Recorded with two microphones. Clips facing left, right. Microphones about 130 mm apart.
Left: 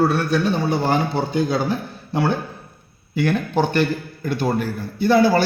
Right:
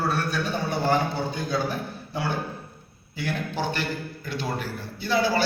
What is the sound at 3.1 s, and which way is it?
A man's voice, 60° left (ahead or behind).